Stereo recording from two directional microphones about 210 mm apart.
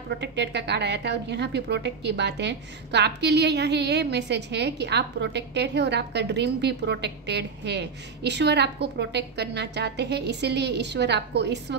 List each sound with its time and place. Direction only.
0.2 s a woman's voice: 55° right (ahead or behind)